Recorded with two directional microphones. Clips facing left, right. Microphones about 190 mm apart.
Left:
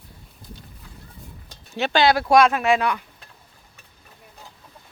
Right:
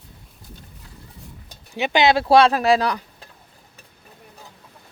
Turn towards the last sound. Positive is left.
turn(degrees=-35)  # may be behind; listen again after turning